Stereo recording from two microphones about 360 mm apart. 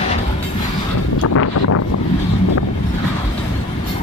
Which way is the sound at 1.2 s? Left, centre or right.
Left.